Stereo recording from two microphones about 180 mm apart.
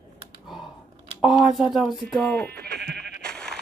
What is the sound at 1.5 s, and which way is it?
Speech, centre (ahead or behind).